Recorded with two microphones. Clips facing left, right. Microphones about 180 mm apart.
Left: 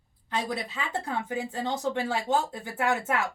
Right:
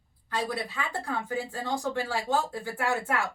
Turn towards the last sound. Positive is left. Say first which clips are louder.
# left 2 dB
turn(degrees=20)  # may be behind; listen again after turning